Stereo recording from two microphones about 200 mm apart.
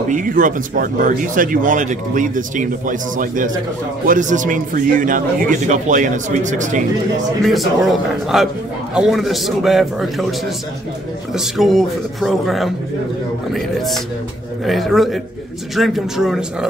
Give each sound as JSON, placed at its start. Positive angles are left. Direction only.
{"t": 0.1, "sound": "speech", "side_deg": -40}
{"t": 7.4, "sound": "a man's voice", "side_deg": 0}
{"t": 11.3, "sound": "a man's voice", "side_deg": 0}